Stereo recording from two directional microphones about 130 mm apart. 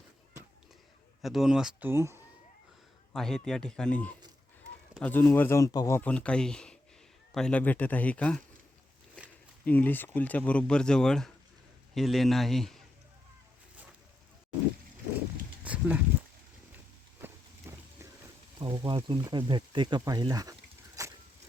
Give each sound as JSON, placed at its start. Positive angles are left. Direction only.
{"t": 1.2, "sound": "speech", "side_deg": 0}
{"t": 1.9, "sound": "speech", "side_deg": -20}
{"t": 3.1, "sound": "speech", "side_deg": 5}
{"t": 6.0, "sound": "speech", "side_deg": 10}
{"t": 9.6, "sound": "speech", "side_deg": 15}
{"t": 15.6, "sound": "a sound", "side_deg": -10}
{"t": 18.6, "sound": "speech", "side_deg": -35}